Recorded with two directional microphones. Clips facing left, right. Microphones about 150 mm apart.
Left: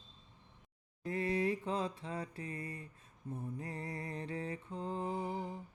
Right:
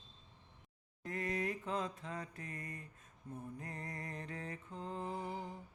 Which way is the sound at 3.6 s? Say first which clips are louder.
Left 4 dB; 30° left (ahead or behind).